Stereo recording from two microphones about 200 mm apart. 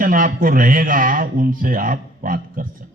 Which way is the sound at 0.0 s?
45° right (ahead or behind).